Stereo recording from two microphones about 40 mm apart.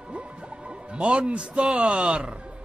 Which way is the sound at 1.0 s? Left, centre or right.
Right.